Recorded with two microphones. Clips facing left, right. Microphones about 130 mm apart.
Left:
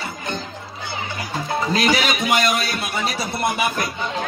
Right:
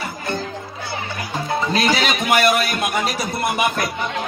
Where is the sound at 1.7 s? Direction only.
20° right (ahead or behind).